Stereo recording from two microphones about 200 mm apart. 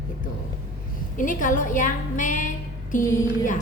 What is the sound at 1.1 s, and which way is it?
A woman's voice, 40° left (ahead or behind).